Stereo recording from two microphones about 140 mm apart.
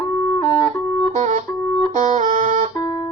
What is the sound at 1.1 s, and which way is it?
Music, 60° right (ahead or behind).